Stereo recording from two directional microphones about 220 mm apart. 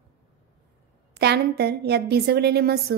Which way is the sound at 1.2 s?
50° right (ahead or behind).